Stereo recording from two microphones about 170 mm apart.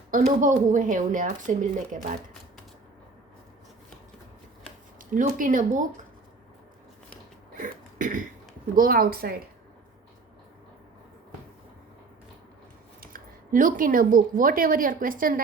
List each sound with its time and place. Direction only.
0.1 s speech: 50° right (ahead or behind)
5.1 s speech: 55° right (ahead or behind)
7.6 s burping: 50° right (ahead or behind)
8.7 s a woman's voice: 55° right (ahead or behind)
13.0 s speech: 55° right (ahead or behind)